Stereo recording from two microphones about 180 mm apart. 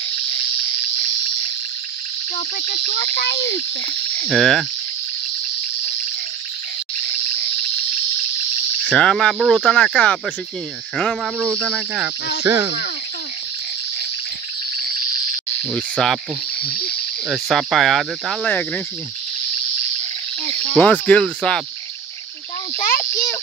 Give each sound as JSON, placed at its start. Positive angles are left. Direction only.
{"t": 4.2, "sound": "speech", "side_deg": 0}
{"t": 8.8, "sound": "speech", "side_deg": 5}
{"t": 11.3, "sound": "cricket", "side_deg": -10}
{"t": 11.6, "sound": "speech", "side_deg": 0}
{"t": 15.7, "sound": "speech", "side_deg": 5}
{"t": 17.3, "sound": "speech", "side_deg": 0}
{"t": 20.7, "sound": "speech", "side_deg": 10}
{"t": 22.8, "sound": "a child's voice", "side_deg": 45}